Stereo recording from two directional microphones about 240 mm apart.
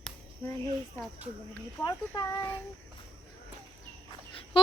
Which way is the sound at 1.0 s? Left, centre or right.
Centre.